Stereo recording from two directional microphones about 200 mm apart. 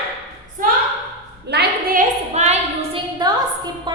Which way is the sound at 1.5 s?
55° right (ahead or behind).